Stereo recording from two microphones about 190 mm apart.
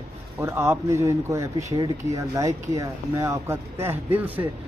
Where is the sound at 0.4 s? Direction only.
15° right (ahead or behind).